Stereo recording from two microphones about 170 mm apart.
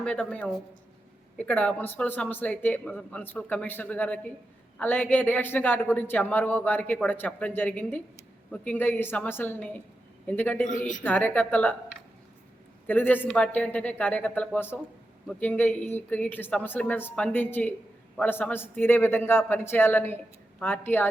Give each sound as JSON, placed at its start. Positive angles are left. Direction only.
{"t": 0.0, "sound": "a man's voice", "side_deg": 5}
{"t": 10.7, "sound": "a woman's voice", "side_deg": 50}
{"t": 11.0, "sound": "a man's voice", "side_deg": 10}
{"t": 12.9, "sound": "a man's voice", "side_deg": 10}